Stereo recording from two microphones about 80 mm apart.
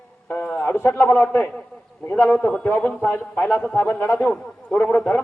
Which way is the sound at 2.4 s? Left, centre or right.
Left.